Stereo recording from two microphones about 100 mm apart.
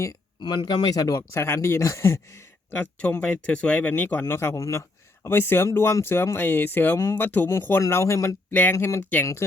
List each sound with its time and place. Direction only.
0.4 s speech: 45° left (ahead or behind); by 2.2 s 30° left (ahead or behind)
2.7 s speech: 15° left (ahead or behind)
6.9 s speech: 30° left (ahead or behind)